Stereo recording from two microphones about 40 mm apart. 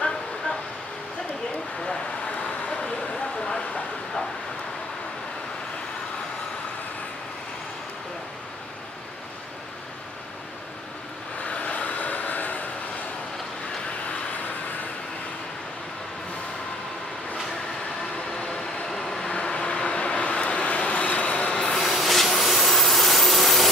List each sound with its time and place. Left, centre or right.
2.3 s vehicle: left
11.4 s vehicle: left
18.4 s train: left
18.9 s vehicle: centre; by 21.5 s left
21.5 s a sound: centre
21.8 s a sound: centre